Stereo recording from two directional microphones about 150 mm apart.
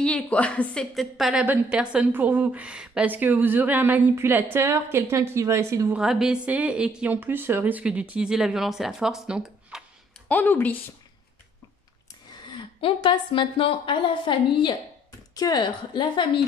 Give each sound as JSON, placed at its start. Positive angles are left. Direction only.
{"t": 0.0, "sound": "a woman's voice", "side_deg": 10}
{"t": 5.9, "sound": "a woman's voice", "side_deg": -5}
{"t": 10.2, "sound": "a woman's voice", "side_deg": 10}
{"t": 12.3, "sound": "a woman's voice", "side_deg": 30}